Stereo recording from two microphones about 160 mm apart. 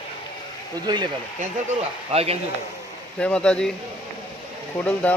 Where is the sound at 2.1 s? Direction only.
40° right (ahead or behind).